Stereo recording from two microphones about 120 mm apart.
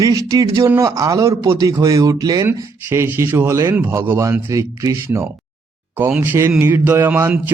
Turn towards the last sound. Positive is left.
turn(degrees=-20)  # may be behind; listen again after turning